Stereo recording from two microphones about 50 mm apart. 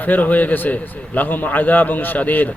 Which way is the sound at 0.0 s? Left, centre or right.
Left.